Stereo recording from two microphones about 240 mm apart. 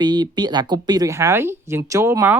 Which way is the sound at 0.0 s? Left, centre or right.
Centre.